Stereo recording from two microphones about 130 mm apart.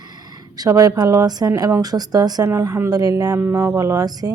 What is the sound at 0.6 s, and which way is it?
A woman's voice, 25° right (ahead or behind).